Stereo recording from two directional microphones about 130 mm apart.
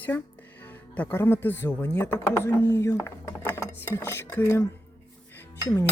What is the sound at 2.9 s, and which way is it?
Speech, 15° left (ahead or behind).